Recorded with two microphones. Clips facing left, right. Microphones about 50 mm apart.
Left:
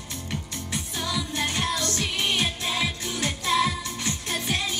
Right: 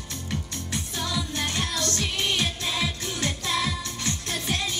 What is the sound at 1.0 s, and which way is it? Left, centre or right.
Music, left.